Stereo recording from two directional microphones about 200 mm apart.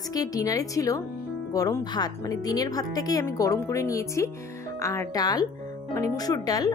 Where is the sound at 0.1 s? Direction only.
20° left (ahead or behind).